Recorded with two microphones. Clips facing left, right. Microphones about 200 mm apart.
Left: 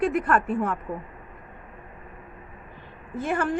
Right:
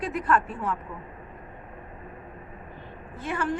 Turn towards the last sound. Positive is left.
turn(degrees=50)  # may be behind; listen again after turning